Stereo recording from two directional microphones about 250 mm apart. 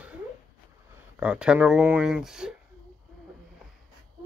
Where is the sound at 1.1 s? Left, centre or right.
Centre.